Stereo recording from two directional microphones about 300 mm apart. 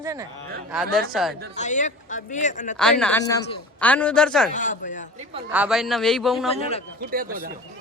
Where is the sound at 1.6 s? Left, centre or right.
Left.